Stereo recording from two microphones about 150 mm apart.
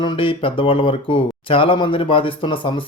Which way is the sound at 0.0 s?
35° left (ahead or behind).